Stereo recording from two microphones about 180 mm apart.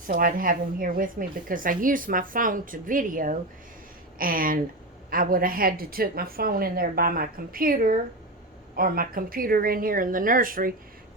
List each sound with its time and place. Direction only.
0.1 s speech: 55° right (ahead or behind)